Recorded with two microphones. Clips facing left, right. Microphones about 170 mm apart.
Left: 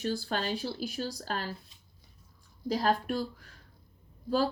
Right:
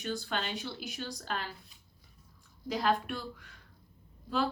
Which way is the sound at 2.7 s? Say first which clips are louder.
Left 2 dB; 35° left (ahead or behind).